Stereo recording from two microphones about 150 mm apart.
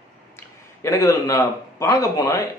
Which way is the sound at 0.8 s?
20° left (ahead or behind).